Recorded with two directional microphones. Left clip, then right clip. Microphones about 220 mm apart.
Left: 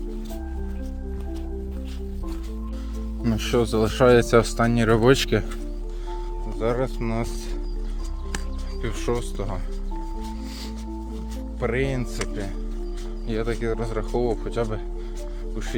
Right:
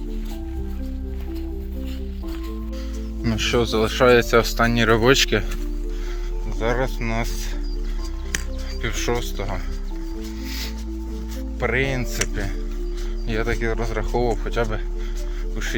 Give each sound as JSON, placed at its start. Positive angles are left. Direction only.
{"t": 3.2, "sound": "speech", "side_deg": 15}
{"t": 6.6, "sound": "speech", "side_deg": 10}
{"t": 8.8, "sound": "speech", "side_deg": 15}
{"t": 11.6, "sound": "speech", "side_deg": 10}
{"t": 13.2, "sound": "speech", "side_deg": 0}